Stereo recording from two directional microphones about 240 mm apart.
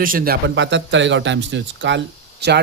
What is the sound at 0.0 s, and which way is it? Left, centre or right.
A man's voice, right.